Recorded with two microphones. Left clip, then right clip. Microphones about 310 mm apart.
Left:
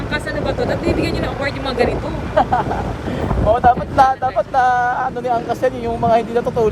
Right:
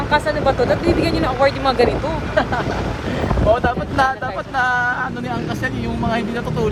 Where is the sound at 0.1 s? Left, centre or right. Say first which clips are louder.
Right 5 dB; centre.